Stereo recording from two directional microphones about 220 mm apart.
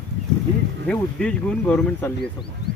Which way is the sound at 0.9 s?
5° left (ahead or behind).